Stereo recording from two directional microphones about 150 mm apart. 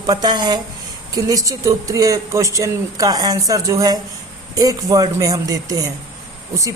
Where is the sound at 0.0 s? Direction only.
25° right (ahead or behind).